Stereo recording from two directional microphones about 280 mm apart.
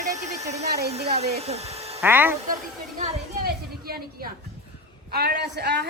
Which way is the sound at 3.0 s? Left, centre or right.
Right.